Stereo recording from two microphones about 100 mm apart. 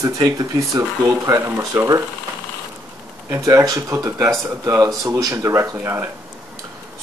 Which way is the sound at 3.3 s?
30° right (ahead or behind).